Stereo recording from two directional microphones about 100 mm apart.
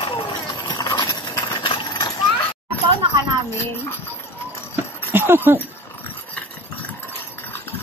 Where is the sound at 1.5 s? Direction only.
55° left (ahead or behind).